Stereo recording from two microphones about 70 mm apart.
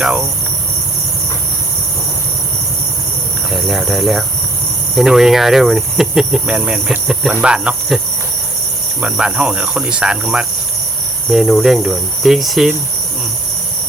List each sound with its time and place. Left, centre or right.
3.5 s speech: centre
9.0 s speech: centre
11.3 s speech: centre